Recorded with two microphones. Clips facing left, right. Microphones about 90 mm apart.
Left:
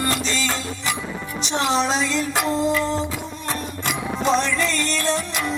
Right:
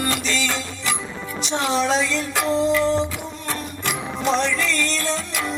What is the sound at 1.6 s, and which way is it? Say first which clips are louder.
Music: even; 20° left (ahead or behind).